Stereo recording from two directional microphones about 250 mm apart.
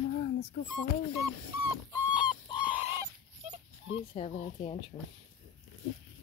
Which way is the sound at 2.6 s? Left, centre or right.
Centre.